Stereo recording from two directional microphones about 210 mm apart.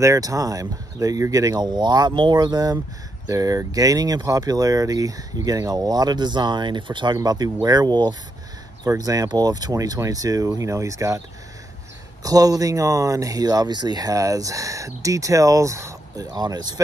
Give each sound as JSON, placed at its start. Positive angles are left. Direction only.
{"t": 0.0, "sound": "speech", "side_deg": -15}